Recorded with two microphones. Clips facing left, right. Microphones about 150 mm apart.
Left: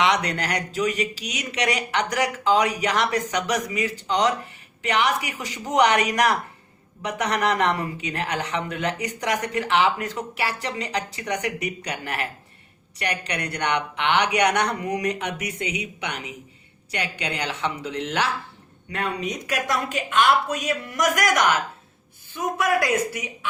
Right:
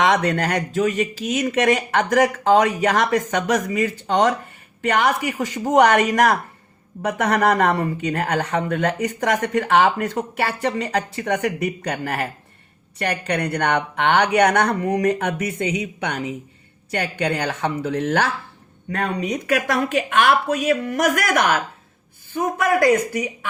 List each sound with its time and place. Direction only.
0.0 s a man's voice: 50° right (ahead or behind)
19.5 s a woman's voice: 60° right (ahead or behind)
22.6 s a man's voice: 50° right (ahead or behind)